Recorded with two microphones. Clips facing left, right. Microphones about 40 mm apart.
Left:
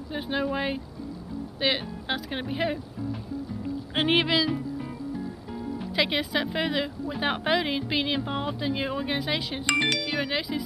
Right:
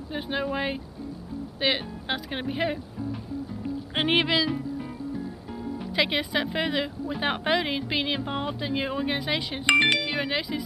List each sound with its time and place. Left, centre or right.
0.1 s speech: centre
3.9 s speech: centre
9.7 s speech: right
10.1 s speech: centre